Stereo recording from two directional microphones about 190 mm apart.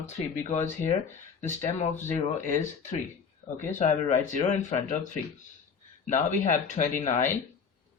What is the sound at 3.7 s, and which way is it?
Speech, 40° left (ahead or behind).